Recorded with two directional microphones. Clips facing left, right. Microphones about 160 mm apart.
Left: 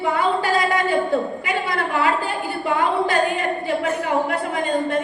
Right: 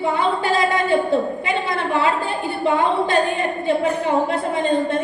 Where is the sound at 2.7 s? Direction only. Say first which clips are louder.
Left 1 dB; 25° right (ahead or behind).